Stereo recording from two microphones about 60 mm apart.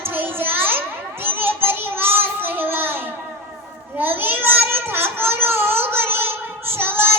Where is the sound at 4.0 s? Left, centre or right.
Right.